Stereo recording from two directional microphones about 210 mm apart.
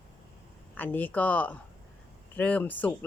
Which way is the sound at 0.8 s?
10° left (ahead or behind).